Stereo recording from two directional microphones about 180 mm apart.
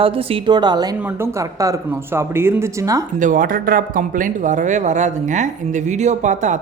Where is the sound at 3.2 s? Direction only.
50° right (ahead or behind).